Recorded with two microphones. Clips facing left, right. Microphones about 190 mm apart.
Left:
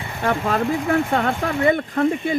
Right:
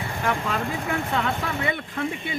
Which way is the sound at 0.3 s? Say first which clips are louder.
Left 7 dB; 45° left (ahead or behind).